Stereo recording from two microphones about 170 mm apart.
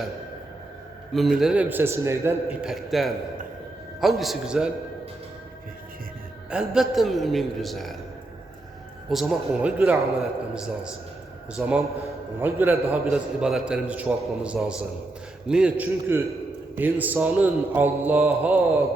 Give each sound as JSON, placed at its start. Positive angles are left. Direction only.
{"t": 1.1, "sound": "a man's voice", "side_deg": 0}
{"t": 6.5, "sound": "a man's voice", "side_deg": -5}
{"t": 9.0, "sound": "a man's voice", "side_deg": 0}